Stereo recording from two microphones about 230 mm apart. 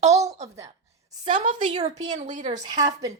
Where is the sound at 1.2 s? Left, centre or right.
Right.